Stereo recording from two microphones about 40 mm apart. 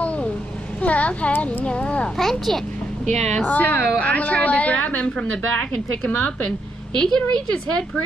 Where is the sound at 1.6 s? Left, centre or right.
Left.